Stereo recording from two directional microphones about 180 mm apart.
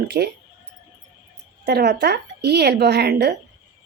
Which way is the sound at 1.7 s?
65° right (ahead or behind).